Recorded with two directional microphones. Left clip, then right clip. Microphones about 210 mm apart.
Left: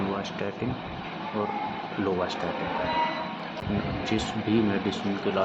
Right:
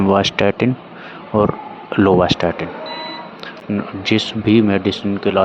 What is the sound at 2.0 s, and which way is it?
Speech, 45° right (ahead or behind).